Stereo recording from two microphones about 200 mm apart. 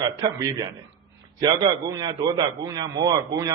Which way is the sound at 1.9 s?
20° right (ahead or behind).